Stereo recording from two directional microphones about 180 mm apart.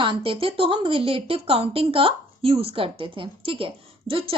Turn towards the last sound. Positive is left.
turn(degrees=-30)  # may be behind; listen again after turning